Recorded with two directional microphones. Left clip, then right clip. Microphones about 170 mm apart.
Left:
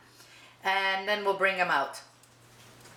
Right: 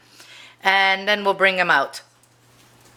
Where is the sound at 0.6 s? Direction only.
30° right (ahead or behind).